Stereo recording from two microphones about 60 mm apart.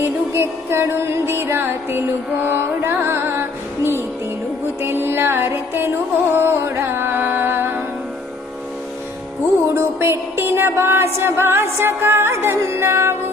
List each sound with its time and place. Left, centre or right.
0.0 s music: right
4.8 s music: right
9.7 s music: right